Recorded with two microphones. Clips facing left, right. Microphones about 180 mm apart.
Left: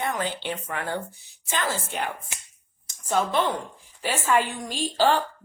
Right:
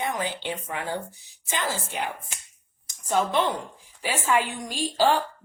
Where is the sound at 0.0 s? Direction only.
15° right (ahead or behind).